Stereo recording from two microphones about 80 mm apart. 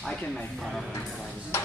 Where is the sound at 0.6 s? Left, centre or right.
Centre.